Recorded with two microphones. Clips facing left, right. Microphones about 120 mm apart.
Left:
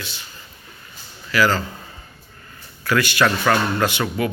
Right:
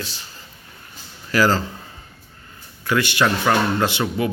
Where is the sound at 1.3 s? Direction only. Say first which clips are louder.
Right 1 dB; 35° right (ahead or behind).